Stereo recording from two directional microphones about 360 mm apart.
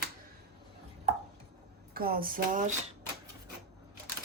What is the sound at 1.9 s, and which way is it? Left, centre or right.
Speech, right.